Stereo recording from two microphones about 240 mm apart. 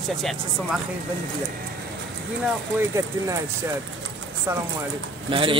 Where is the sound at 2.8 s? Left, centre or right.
Centre.